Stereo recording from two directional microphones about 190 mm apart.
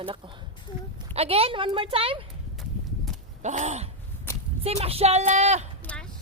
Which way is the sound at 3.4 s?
35° right (ahead or behind).